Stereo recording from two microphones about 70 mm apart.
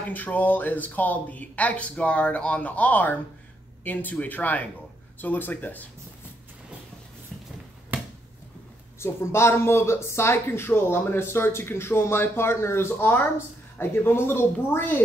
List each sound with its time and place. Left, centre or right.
0.1 s speech: left
7.9 s finger snapping: right
9.0 s speech: left